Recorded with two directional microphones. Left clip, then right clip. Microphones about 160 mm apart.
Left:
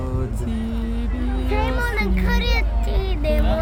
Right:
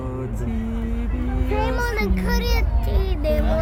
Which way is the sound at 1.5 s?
60° right (ahead or behind).